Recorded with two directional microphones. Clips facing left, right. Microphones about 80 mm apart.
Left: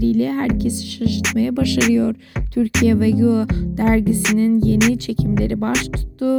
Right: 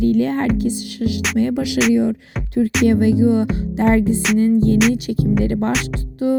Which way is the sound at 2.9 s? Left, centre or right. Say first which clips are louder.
Even; right.